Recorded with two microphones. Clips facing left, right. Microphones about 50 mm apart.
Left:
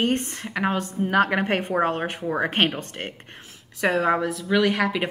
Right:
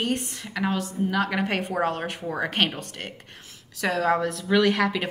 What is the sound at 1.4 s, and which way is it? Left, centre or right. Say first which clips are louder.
A woman's voice: left 3 dB; left.